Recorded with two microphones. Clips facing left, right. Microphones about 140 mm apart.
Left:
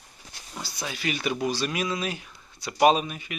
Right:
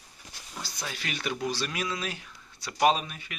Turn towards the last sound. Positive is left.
turn(degrees=15)  # may be behind; listen again after turning